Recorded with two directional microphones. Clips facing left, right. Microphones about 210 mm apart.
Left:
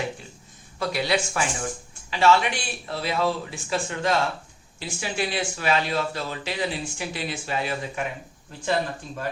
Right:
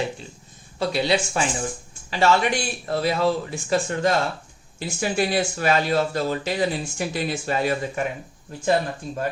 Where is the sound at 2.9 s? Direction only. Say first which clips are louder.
Right 4 dB; 45° right (ahead or behind).